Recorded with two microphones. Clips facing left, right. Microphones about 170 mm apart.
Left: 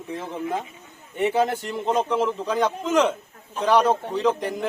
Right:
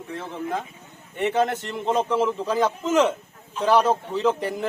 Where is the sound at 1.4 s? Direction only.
Centre (ahead or behind).